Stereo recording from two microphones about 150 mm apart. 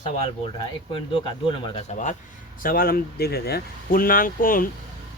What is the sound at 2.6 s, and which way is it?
Speech, 70° left (ahead or behind).